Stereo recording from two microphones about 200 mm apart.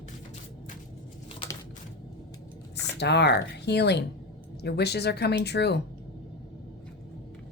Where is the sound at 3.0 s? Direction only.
60° left (ahead or behind).